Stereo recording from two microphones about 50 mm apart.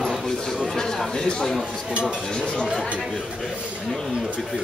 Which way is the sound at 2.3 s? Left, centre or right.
Centre.